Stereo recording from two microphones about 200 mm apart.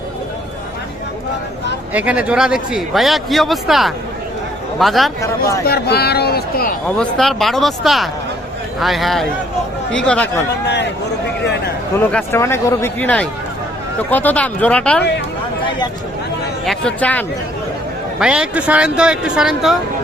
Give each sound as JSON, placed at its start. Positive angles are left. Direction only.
{"t": 1.9, "sound": "a man's voice", "side_deg": -5}
{"t": 5.6, "sound": "speech", "side_deg": 55}
{"t": 6.8, "sound": "a man's voice", "side_deg": 5}
{"t": 11.9, "sound": "speech", "side_deg": 10}
{"t": 16.6, "sound": "speech", "side_deg": 5}
{"t": 18.2, "sound": "a man's voice", "side_deg": -5}